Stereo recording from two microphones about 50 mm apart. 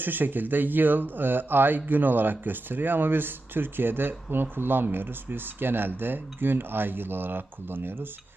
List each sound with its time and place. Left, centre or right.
0.0 s speech: right